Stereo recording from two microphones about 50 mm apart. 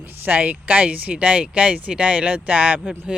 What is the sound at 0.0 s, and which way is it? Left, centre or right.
Speech, right.